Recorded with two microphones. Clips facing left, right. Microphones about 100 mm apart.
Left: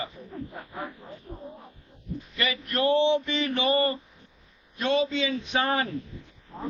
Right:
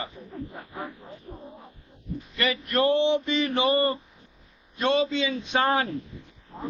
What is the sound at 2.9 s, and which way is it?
Mantra, 30° left (ahead or behind).